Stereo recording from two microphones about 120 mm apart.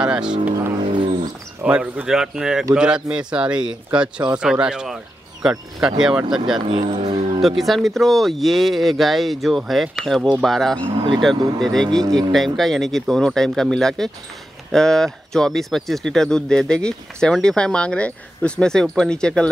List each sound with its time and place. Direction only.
0.0 s speech: 5° right (ahead or behind)
1.6 s speech: 10° right (ahead or behind)
6.8 s speech: 70° right (ahead or behind)
7.4 s speech: centre (ahead or behind)
10.8 s speech: 40° right (ahead or behind)
11.6 s speech: 5° left (ahead or behind)